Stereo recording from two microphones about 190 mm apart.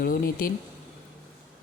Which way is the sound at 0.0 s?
50° left (ahead or behind).